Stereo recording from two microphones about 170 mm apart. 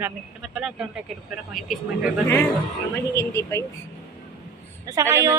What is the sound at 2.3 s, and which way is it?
Speech, 15° left (ahead or behind).